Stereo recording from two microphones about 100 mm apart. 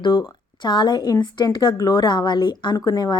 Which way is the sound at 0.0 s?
50° left (ahead or behind).